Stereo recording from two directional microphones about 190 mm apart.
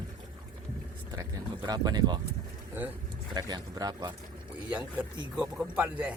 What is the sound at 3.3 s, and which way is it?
Speech, 20° right (ahead or behind).